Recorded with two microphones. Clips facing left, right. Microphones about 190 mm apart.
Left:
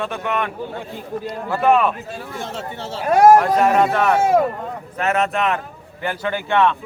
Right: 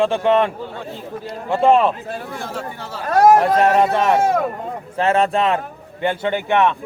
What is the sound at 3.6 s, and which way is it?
A man's voice, 20° right (ahead or behind).